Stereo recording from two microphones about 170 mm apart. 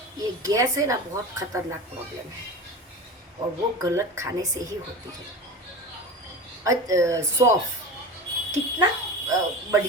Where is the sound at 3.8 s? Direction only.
20° right (ahead or behind).